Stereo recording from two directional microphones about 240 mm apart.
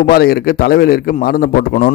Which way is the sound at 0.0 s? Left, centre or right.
Left.